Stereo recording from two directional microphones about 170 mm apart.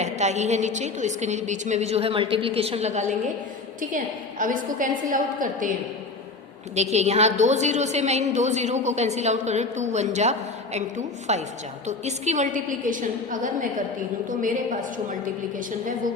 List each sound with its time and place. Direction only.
0.0 s a woman's voice: 40° right (ahead or behind)
6.9 s a woman's voice: 40° right (ahead or behind)